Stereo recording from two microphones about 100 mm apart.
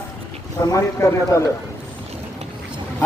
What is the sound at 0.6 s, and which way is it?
Speech, 35° left (ahead or behind).